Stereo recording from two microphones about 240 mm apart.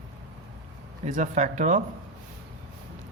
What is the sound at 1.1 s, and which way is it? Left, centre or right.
Speech, right.